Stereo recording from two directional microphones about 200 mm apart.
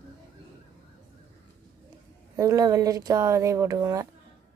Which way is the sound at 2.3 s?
15° right (ahead or behind).